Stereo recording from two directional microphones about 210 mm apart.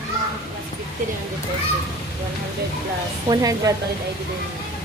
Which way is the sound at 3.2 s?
15° right (ahead or behind).